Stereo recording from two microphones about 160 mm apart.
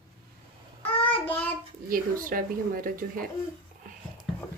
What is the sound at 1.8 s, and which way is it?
Speech, 60° right (ahead or behind).